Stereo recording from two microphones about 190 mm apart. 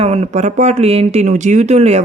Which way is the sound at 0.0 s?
35° right (ahead or behind).